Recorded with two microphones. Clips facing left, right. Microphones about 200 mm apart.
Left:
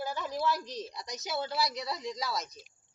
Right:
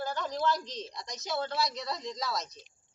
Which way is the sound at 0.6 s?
20° right (ahead or behind).